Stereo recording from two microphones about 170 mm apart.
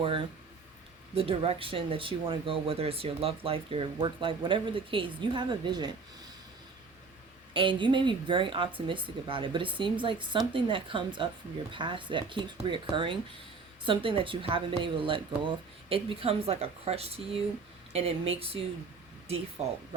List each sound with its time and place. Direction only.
1.1 s speech: 35° right (ahead or behind)
7.5 s speech: 30° right (ahead or behind)